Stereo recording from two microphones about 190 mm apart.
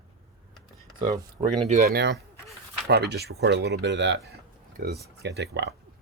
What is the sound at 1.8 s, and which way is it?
Speech, 60° right (ahead or behind).